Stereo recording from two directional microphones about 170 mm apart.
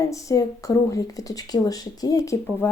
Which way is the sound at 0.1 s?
20° left (ahead or behind).